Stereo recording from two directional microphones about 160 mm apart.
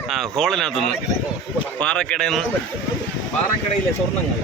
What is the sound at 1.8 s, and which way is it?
Speech, 5° left (ahead or behind).